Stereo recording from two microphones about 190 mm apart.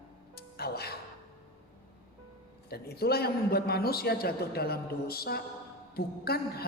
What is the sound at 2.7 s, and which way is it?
A woman's voice, 55° left (ahead or behind).